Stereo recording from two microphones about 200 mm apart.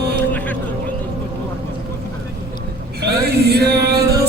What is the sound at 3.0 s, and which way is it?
Music, 50° right (ahead or behind).